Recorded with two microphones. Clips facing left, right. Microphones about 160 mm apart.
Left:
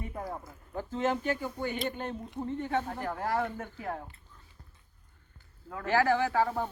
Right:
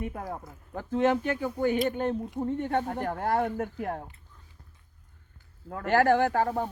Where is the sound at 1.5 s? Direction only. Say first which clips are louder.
Right 7 dB; 45° right (ahead or behind).